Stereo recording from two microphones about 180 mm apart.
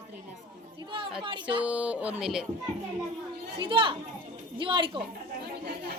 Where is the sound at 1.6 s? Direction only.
5° right (ahead or behind).